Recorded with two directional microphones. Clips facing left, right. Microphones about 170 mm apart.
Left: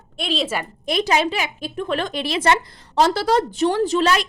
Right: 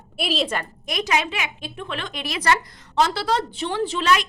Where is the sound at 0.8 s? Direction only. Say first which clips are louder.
Left 5 dB; 30° left (ahead or behind).